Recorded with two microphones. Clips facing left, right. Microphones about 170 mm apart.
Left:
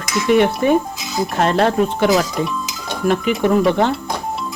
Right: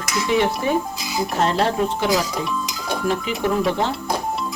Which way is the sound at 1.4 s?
60° left (ahead or behind).